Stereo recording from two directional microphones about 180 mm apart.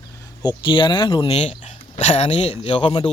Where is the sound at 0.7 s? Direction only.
30° left (ahead or behind).